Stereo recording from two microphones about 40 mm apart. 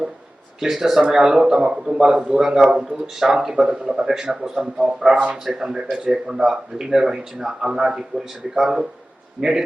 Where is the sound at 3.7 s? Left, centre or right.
Right.